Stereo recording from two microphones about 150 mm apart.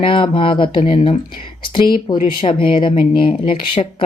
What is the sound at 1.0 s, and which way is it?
Speech, 35° left (ahead or behind).